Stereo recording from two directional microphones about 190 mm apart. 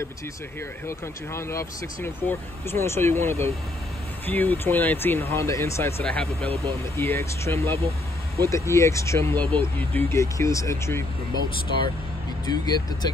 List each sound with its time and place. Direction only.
0.8 s speech: 15° left (ahead or behind)
12.4 s speech: 20° left (ahead or behind)